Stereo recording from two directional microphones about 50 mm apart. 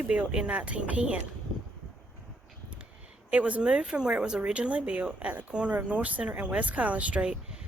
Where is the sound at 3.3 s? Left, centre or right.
Right.